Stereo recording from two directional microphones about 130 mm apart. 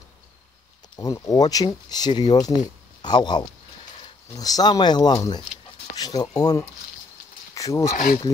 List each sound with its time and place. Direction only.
0.9 s speech: 25° left (ahead or behind)
5.9 s a sound: 30° left (ahead or behind)
6.3 s speech: 30° left (ahead or behind)